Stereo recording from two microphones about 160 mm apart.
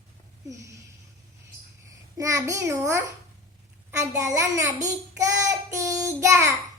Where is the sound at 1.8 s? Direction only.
20° right (ahead or behind).